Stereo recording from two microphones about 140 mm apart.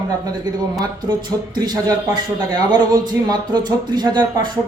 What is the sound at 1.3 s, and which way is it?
Speech, 30° right (ahead or behind).